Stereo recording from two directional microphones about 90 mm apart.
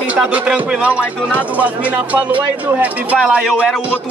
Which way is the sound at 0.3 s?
10° right (ahead or behind).